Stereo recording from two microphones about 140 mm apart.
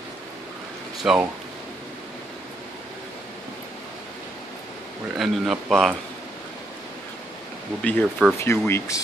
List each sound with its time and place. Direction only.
1.0 s speech: 5° right (ahead or behind)
5.1 s speech: centre (ahead or behind)
7.8 s speech: 10° left (ahead or behind)